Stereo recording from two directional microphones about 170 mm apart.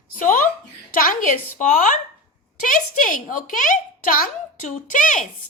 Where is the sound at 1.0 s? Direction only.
50° left (ahead or behind).